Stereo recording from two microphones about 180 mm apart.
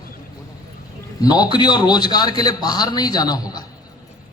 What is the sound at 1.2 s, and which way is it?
A man's voice, 20° left (ahead or behind).